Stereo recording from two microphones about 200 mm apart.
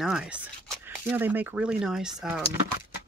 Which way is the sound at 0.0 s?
5° right (ahead or behind).